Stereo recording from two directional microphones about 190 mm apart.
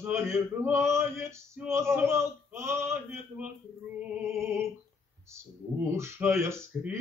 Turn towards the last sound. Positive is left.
turn(degrees=-15)  # may be behind; listen again after turning